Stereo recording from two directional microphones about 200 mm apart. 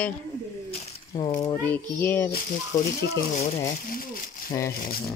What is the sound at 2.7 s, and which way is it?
Speech, 40° left (ahead or behind).